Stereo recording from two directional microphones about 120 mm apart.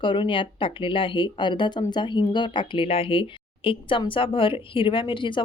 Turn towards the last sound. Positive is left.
turn(degrees=45)  # may be behind; listen again after turning